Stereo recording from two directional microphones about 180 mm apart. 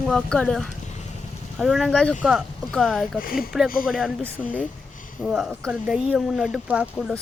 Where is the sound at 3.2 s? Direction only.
55° left (ahead or behind).